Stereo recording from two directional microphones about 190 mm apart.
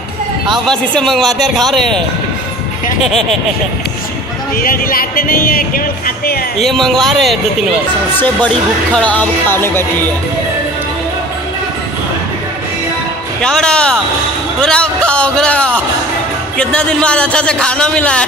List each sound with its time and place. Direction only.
0.7 s a man's voice: centre (ahead or behind)
4.6 s speech: 50° left (ahead or behind)
6.6 s a man's voice: centre (ahead or behind)
8.5 s speech: 5° left (ahead or behind)
13.4 s a man's voice: 5° left (ahead or behind)